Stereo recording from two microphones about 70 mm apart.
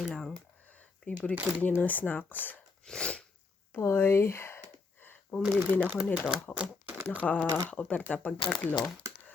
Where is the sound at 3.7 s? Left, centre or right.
Left.